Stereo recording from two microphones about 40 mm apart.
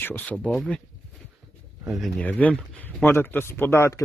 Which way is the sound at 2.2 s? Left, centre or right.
Left.